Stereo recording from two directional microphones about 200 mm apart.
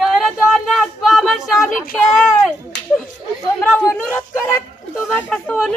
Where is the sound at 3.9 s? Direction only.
5° left (ahead or behind).